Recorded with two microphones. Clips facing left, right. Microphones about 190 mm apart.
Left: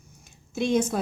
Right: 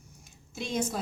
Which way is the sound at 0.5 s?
60° left (ahead or behind).